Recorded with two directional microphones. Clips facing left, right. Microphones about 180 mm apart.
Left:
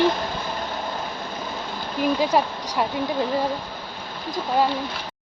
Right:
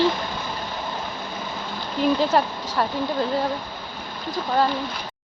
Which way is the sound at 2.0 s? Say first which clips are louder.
Right 1 dB; 10° left (ahead or behind).